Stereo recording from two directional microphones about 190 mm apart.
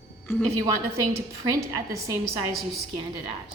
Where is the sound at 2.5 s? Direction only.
Centre (ahead or behind).